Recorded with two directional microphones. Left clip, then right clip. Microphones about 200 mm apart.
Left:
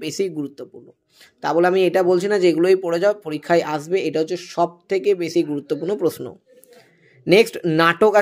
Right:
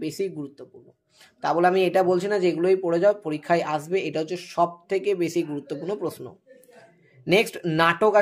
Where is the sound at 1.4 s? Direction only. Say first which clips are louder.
Left 3 dB; 25° left (ahead or behind).